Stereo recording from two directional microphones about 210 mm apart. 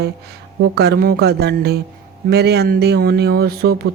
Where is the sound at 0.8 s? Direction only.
50° right (ahead or behind).